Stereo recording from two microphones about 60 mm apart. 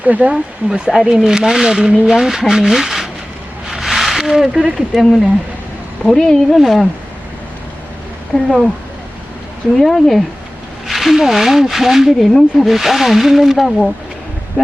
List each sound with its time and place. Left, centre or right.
0.0 s speech: right
0.7 s speech: centre
3.7 s a sound: centre
4.9 s speech: centre
6.1 s speech: centre
6.6 s speech: centre
8.4 s speech: centre
9.7 s speech: centre